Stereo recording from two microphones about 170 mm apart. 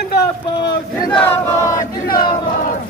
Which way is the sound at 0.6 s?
25° left (ahead or behind).